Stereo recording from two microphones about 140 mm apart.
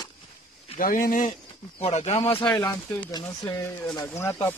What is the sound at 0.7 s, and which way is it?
Speech, 90° left.